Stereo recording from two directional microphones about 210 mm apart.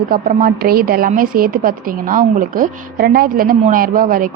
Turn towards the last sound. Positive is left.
turn(degrees=-40)  # may be behind; listen again after turning